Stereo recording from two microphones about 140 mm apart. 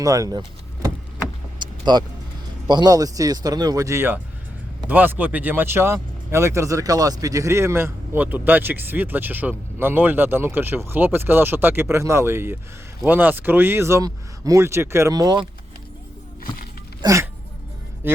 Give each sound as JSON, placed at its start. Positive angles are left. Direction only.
{"t": 0.0, "sound": "speech", "side_deg": -25}
{"t": 1.5, "sound": "vehicle", "side_deg": -30}
{"t": 2.6, "sound": "speech", "side_deg": -30}
{"t": 17.0, "sound": "speech", "side_deg": -25}
{"t": 18.0, "sound": "music", "side_deg": -15}